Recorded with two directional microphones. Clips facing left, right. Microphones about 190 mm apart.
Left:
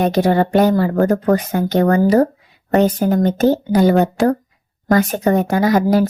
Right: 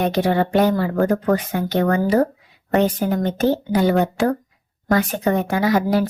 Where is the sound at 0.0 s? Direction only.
40° left (ahead or behind).